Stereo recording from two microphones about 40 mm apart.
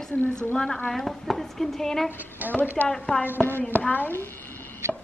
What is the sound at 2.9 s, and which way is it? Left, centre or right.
Speech, centre.